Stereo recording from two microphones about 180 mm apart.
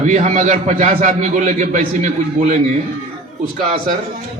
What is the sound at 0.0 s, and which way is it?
A man's voice, 40° right (ahead or behind).